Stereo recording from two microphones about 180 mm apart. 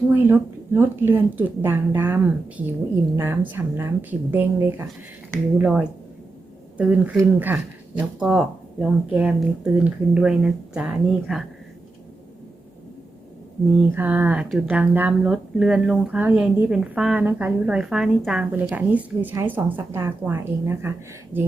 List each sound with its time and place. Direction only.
0.1 s speech: 10° right (ahead or behind)
13.9 s speech: 10° right (ahead or behind)